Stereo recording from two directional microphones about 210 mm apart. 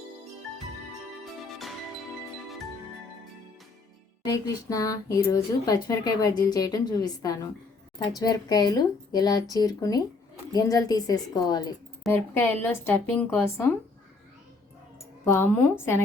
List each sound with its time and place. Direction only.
4.3 s speech: 15° left (ahead or behind)
15.2 s speech: 10° left (ahead or behind)